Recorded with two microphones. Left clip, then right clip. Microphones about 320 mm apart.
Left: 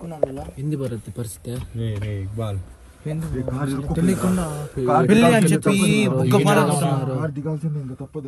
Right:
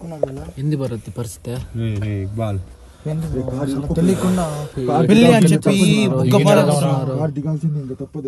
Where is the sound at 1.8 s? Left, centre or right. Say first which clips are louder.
Right 5 dB; centre.